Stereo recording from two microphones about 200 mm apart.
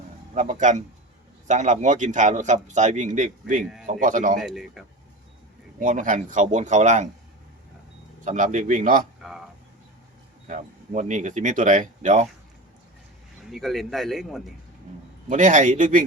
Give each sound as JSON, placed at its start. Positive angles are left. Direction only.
{"t": 0.3, "sound": "a man's voice", "side_deg": -40}
{"t": 4.4, "sound": "speech", "side_deg": 0}
{"t": 5.8, "sound": "a man's voice", "side_deg": -40}
{"t": 8.2, "sound": "a man's voice", "side_deg": -40}
{"t": 10.4, "sound": "speech", "side_deg": -40}
{"t": 13.4, "sound": "speech", "side_deg": 0}
{"t": 15.3, "sound": "a man's voice", "side_deg": -40}